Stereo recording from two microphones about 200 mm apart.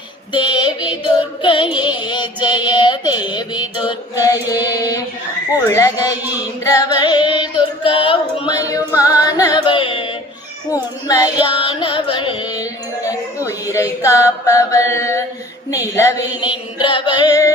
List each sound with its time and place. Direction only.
0.3 s music: 25° left (ahead or behind)